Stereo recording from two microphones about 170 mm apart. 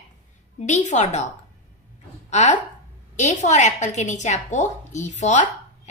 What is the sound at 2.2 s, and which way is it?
A woman's voice, 45° left (ahead or behind).